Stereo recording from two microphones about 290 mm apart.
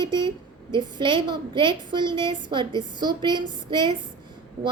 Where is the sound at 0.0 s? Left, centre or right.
Centre.